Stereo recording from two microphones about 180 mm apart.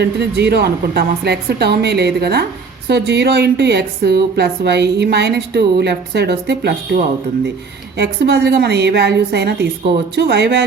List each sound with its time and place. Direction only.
0.0 s a woman's voice: 70° right (ahead or behind)